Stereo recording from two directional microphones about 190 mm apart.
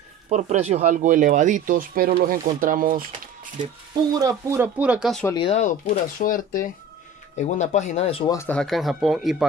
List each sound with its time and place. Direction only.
0.3 s speech: 35° right (ahead or behind)
4.2 s speech: 15° right (ahead or behind)
5.3 s speech: 25° left (ahead or behind)
5.6 s speech: 45° left (ahead or behind)
8.3 s speech: 10° left (ahead or behind)